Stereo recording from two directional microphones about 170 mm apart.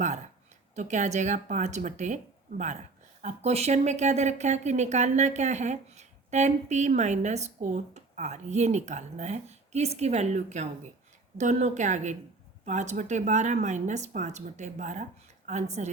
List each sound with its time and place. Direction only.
0.8 s speech: 45° right (ahead or behind)
3.2 s speech: 40° right (ahead or behind)